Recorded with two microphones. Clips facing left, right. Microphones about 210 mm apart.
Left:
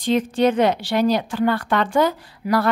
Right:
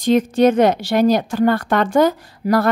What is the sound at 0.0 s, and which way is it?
A woman's voice, 40° right (ahead or behind).